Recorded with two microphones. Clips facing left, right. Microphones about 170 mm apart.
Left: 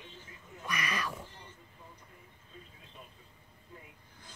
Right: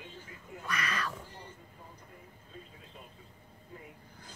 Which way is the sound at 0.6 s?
15° left (ahead or behind).